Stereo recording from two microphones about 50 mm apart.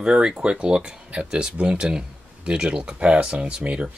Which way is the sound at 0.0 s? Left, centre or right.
Centre.